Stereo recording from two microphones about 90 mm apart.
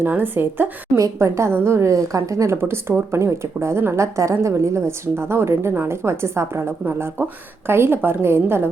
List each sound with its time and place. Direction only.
0.0 s a woman's voice: 25° right (ahead or behind)
0.9 s a woman's voice: 35° right (ahead or behind)